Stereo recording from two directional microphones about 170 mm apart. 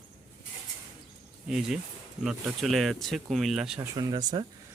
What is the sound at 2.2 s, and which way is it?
Speech, 5° right (ahead or behind).